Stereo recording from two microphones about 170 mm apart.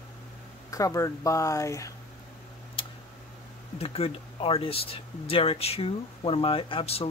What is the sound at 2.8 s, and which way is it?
Tick, 30° left (ahead or behind).